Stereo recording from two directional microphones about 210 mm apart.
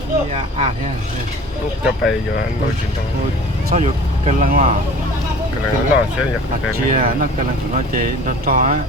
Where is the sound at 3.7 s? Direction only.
35° right (ahead or behind).